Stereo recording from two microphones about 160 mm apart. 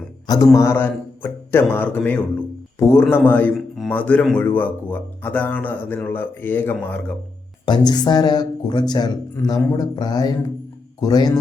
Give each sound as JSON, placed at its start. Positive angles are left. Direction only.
{"t": 0.3, "sound": "speech", "side_deg": 20}
{"t": 7.6, "sound": "speech", "side_deg": 30}